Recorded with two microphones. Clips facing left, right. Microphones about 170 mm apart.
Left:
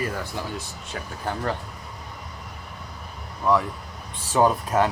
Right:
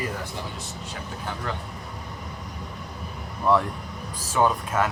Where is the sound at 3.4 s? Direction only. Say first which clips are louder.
Even; centre (ahead or behind).